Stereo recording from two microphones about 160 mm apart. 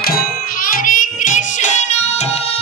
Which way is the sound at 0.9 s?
55° left (ahead or behind).